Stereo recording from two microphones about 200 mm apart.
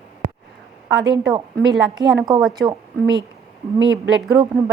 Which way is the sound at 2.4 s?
Centre (ahead or behind).